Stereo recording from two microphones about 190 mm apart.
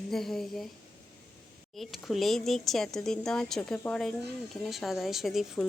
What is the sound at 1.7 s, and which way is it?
Speech, centre (ahead or behind).